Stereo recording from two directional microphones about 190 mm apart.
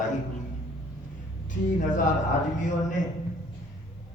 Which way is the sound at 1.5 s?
40° left (ahead or behind).